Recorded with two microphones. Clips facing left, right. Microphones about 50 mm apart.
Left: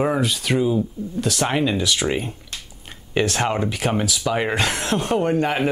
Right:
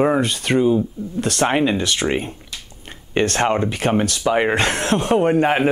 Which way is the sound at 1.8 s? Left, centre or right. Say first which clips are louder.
Right 1 dB; centre.